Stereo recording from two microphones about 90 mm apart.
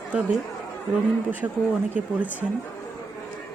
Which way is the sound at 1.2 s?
15° right (ahead or behind).